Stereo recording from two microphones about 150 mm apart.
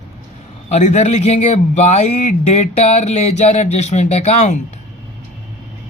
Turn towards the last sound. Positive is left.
turn(degrees=50)  # may be behind; listen again after turning